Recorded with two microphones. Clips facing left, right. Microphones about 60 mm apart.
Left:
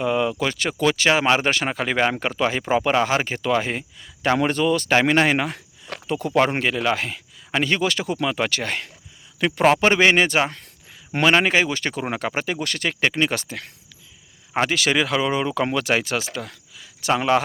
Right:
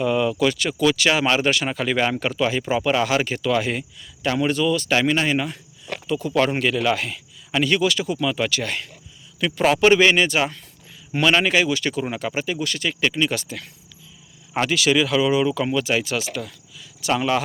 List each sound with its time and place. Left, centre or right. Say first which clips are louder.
0.0 s speech: right 2 dB; left
4.4 s speech: even; left
5.0 s speech: left 2 dB; left
6.5 s speech: right 1 dB; left
9.4 s speech: even; left
14.7 s speech: right 4 dB; left
17.2 s speech: left 3 dB; left